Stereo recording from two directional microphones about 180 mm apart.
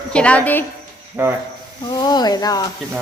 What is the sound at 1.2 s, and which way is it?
Speech, 15° right (ahead or behind).